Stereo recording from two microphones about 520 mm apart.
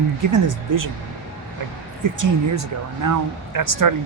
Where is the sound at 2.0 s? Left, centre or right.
Right.